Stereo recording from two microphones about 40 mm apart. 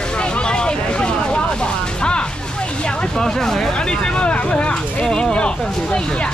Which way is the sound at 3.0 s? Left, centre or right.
Centre.